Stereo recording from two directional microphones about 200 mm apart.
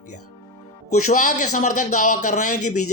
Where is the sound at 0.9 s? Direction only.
40° left (ahead or behind).